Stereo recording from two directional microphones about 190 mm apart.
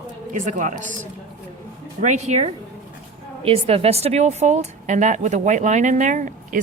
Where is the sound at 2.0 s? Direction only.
40° right (ahead or behind).